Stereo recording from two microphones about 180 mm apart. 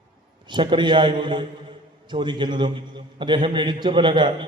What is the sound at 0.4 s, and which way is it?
A man's voice, 25° right (ahead or behind).